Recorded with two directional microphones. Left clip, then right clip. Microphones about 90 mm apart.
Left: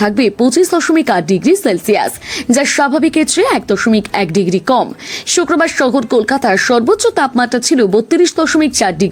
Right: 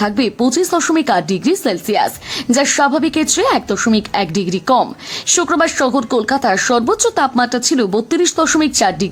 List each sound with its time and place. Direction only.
0.0 s a woman's voice: 35° left (ahead or behind)
7.9 s a woman's voice: 20° left (ahead or behind)